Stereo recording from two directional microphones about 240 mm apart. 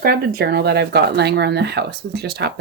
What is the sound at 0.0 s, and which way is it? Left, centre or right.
Speech, right.